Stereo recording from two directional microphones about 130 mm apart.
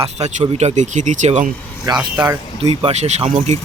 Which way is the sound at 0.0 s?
55° right (ahead or behind).